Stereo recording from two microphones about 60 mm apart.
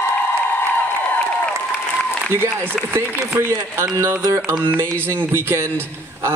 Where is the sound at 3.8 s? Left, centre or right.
Right.